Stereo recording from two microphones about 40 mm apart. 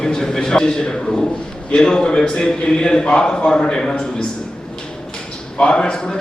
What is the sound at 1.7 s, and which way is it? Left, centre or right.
A man's voice, centre.